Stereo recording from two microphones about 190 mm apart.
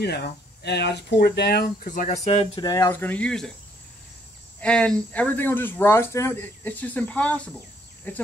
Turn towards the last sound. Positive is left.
turn(degrees=5)  # may be behind; listen again after turning